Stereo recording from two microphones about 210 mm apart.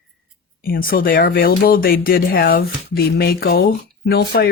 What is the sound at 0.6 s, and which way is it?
Speech, 45° left (ahead or behind).